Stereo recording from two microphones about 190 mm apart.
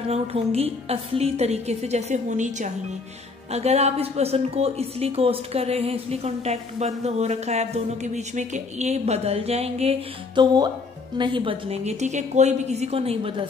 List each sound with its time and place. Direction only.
0.1 s speech: 35° right (ahead or behind)